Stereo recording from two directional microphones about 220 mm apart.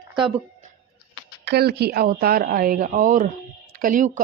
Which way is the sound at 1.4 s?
50° right (ahead or behind).